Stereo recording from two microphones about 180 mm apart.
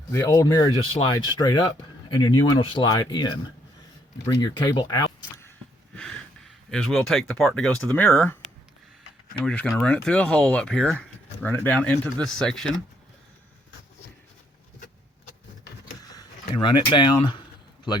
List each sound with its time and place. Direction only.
0.1 s speech: 15° left (ahead or behind)
6.0 s speech: 5° left (ahead or behind)
9.4 s speech: 5° left (ahead or behind)
16.0 s speech: 20° left (ahead or behind)